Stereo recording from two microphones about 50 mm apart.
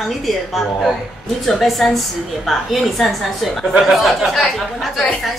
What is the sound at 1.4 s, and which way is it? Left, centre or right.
A woman's voice, centre.